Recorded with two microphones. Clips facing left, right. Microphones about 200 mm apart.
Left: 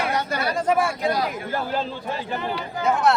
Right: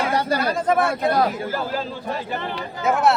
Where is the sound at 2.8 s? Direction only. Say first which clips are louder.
Right 1 dB; 5° right (ahead or behind).